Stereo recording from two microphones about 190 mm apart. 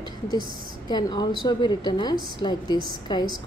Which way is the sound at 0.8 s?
20° left (ahead or behind).